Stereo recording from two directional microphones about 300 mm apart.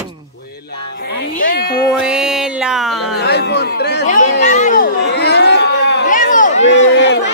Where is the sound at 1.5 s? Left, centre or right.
Left.